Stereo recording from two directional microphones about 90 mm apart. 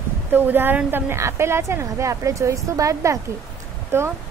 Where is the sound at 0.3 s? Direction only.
20° right (ahead or behind).